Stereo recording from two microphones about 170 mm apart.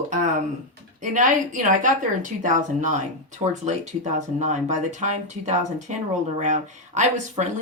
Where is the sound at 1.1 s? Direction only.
45° right (ahead or behind).